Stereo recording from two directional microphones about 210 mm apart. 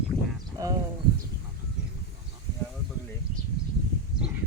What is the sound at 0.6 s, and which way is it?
Speech, 15° right (ahead or behind).